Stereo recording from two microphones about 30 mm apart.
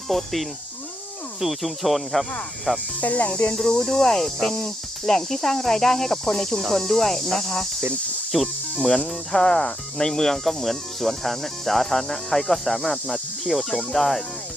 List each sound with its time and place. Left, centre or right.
0.1 s speech: centre
2.7 s speech: centre
3.0 s speech: left
3.8 s speech: centre
8.3 s speech: centre
8.8 s speech: centre